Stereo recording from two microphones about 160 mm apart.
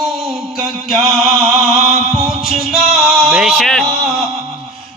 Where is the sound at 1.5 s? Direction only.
40° right (ahead or behind).